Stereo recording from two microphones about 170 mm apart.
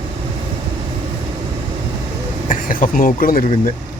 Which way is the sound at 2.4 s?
50° left (ahead or behind).